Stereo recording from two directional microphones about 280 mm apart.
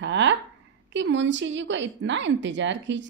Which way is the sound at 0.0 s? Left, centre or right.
Right.